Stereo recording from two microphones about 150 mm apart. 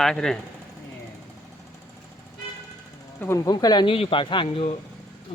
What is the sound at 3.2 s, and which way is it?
Speech, 20° left (ahead or behind).